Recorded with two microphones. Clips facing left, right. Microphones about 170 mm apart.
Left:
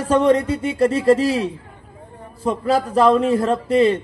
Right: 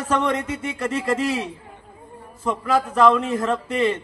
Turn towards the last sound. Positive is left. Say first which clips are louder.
# left 6 dB
turn(degrees=35)  # may be behind; listen again after turning